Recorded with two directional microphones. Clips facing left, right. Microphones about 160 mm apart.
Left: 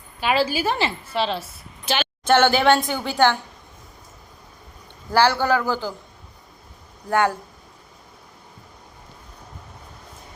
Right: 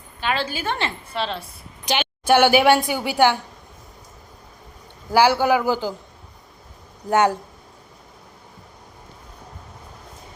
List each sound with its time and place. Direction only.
0.2 s a woman's voice: 10° left (ahead or behind)
1.8 s a woman's voice: 15° right (ahead or behind)
5.1 s a man's voice: 10° right (ahead or behind)
7.1 s speech: 20° right (ahead or behind)